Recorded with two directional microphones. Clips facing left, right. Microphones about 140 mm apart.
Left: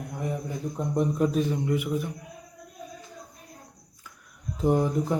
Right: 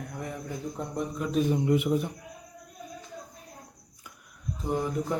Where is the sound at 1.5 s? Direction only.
15° right (ahead or behind).